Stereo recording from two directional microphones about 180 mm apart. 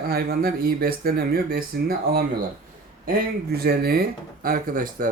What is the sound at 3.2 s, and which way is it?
Speech, 55° right (ahead or behind).